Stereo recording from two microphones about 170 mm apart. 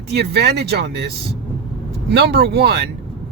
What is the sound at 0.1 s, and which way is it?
Speech, 70° right (ahead or behind).